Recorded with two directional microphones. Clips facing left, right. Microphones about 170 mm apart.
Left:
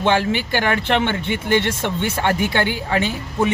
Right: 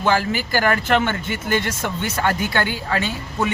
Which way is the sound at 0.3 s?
40° right (ahead or behind).